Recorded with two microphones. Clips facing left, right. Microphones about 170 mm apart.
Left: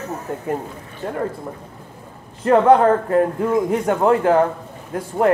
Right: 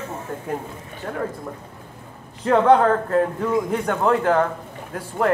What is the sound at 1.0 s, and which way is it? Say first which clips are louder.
Speech: left 4 dB; 10° left (ahead or behind).